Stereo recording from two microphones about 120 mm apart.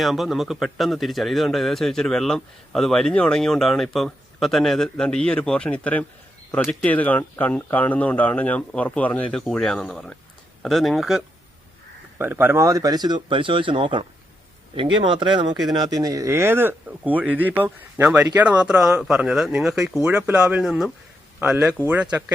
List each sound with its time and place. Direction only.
0.0 s speech: centre (ahead or behind)
12.2 s speech: 20° right (ahead or behind)